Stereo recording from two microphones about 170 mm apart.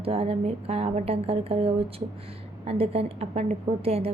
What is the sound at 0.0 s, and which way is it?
A woman's voice, 35° right (ahead or behind).